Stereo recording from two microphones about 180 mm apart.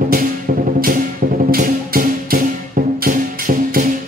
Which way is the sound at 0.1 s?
55° right (ahead or behind).